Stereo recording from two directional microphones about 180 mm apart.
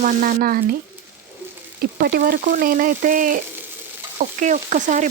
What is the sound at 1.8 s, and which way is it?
Frying, 60° right (ahead or behind).